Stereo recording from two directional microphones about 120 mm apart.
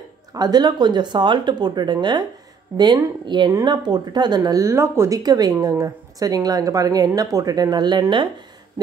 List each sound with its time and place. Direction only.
0.3 s speech: 35° right (ahead or behind)